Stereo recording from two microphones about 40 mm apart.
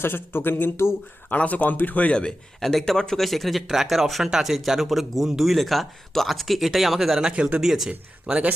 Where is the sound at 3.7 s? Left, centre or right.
Centre.